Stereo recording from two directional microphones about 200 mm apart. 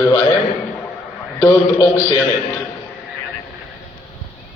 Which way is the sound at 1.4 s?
15° left (ahead or behind).